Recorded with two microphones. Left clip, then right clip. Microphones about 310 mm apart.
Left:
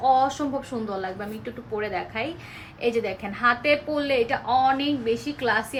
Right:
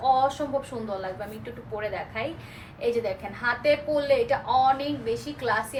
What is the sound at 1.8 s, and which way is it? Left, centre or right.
A woman's voice, left.